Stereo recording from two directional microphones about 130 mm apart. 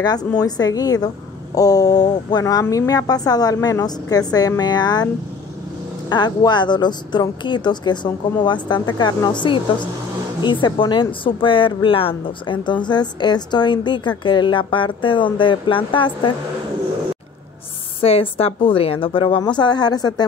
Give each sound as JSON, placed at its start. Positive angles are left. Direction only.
{"t": 0.0, "sound": "a woman's voice", "side_deg": 30}
{"t": 18.0, "sound": "a woman's voice", "side_deg": 50}